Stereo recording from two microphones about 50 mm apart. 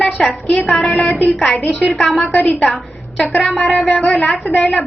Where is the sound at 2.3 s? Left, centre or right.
Left.